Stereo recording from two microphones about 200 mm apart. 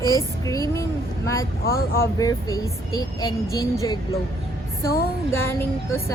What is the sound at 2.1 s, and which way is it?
A woman's voice, 15° left (ahead or behind).